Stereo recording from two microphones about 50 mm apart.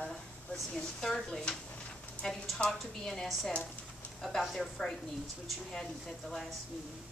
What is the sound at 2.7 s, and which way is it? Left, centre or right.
Speech, centre.